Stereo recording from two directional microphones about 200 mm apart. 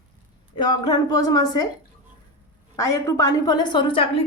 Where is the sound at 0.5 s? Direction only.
20° left (ahead or behind).